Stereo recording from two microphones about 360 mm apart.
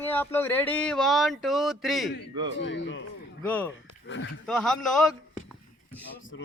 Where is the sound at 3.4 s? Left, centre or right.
Centre.